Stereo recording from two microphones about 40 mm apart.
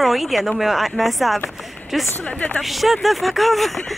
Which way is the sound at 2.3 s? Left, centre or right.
Left.